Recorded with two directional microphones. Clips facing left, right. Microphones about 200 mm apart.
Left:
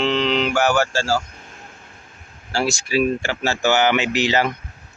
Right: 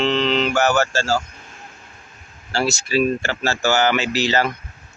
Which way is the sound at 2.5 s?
15° left (ahead or behind).